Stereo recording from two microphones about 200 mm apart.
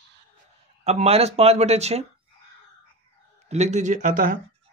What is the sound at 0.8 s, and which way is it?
Speech, 30° right (ahead or behind).